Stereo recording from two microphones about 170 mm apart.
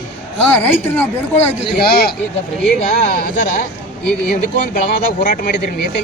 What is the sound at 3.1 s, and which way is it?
Speech, 50° left (ahead or behind).